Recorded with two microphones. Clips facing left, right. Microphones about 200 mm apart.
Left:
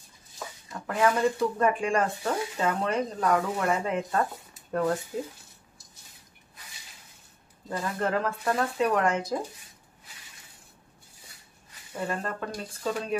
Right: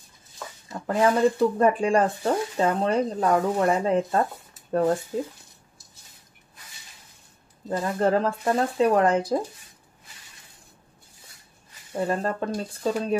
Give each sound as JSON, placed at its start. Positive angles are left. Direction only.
{"t": 0.8, "sound": "speech", "side_deg": -30}
{"t": 7.7, "sound": "speech", "side_deg": -35}
{"t": 11.9, "sound": "speech", "side_deg": -35}